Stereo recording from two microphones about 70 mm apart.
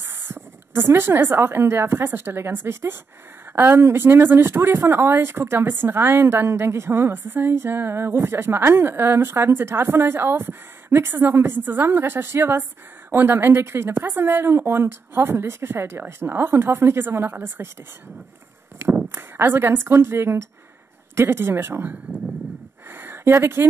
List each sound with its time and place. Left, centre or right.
0.0 s speech: right
18.8 s speech: right
22.8 s a sound: right